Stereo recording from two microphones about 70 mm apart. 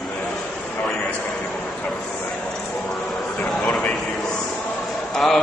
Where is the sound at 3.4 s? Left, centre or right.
Centre.